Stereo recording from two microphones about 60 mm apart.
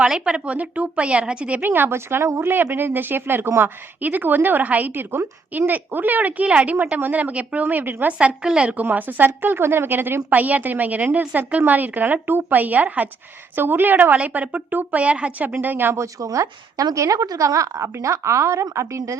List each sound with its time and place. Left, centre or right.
0.0 s a woman's voice: centre
1.6 s speech: right
2.7 s speech: right
4.0 s a woman's voice: right
8.0 s a woman's voice: right
8.7 s speech: right
10.2 s a woman's voice: right
16.0 s speech: right